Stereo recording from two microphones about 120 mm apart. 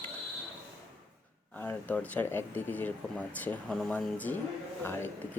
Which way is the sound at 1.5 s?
15° left (ahead or behind).